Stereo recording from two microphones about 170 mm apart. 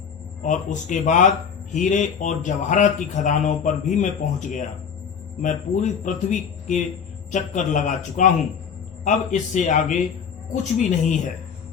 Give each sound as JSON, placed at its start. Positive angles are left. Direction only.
{"t": 0.4, "sound": "speech", "side_deg": 45}